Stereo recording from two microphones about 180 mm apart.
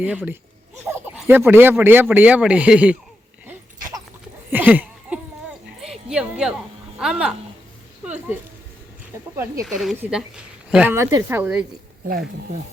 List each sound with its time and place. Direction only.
0.0 s speech: 10° right (ahead or behind)
4.4 s a sound: 10° right (ahead or behind)
7.0 s speech: 5° right (ahead or behind)
8.0 s a sound: 10° right (ahead or behind)
9.3 s speech: 15° right (ahead or behind)
9.6 s speech: centre (ahead or behind)
12.0 s speech: 55° right (ahead or behind)